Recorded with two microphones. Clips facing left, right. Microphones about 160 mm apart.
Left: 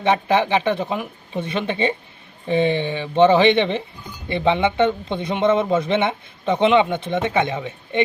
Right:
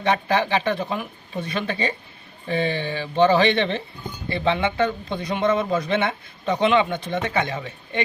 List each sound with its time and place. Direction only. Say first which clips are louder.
0.0 s speech: left 3 dB; 20° left (ahead or behind)